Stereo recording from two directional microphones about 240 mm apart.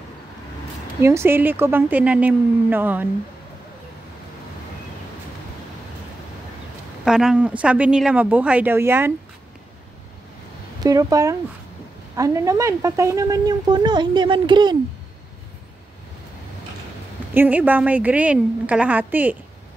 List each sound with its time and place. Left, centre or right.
1.0 s a woman's voice: centre
7.1 s speech: centre
10.8 s a woman's voice: centre
17.3 s a woman's voice: centre